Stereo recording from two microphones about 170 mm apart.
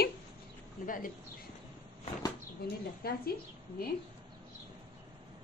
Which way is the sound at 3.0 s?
60° left (ahead or behind).